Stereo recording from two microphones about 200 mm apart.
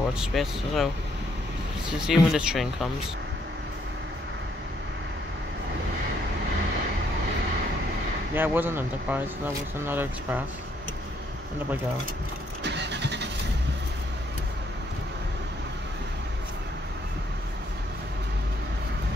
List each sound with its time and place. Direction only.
0.2 s speech: centre (ahead or behind)
1.9 s speech: 5° right (ahead or behind)
8.4 s speech: 10° right (ahead or behind)
12.6 s vehicle: 60° right (ahead or behind)